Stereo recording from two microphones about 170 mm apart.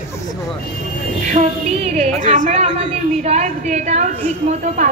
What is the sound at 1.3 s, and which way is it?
A woman's voice, 45° right (ahead or behind).